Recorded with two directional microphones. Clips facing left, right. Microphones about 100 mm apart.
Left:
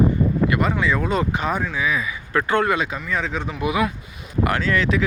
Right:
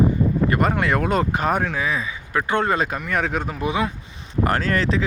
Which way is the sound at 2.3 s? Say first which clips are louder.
Left 2 dB; 20° right (ahead or behind).